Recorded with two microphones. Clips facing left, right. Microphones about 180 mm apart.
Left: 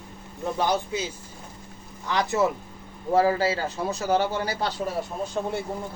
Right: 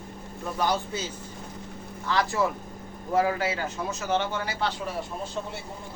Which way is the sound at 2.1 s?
20° left (ahead or behind).